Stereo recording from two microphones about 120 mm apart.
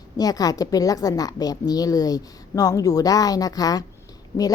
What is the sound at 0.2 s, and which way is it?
Speech, 30° left (ahead or behind).